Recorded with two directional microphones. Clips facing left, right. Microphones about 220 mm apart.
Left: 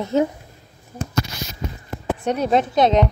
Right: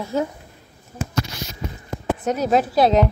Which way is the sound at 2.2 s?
5° right (ahead or behind).